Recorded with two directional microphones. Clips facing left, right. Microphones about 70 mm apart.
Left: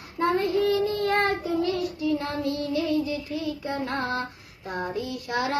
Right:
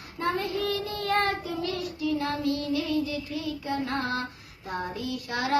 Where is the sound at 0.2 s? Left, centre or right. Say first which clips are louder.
Left 5 dB; left.